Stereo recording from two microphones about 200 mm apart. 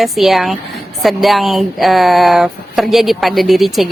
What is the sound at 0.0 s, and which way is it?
Speech, centre (ahead or behind).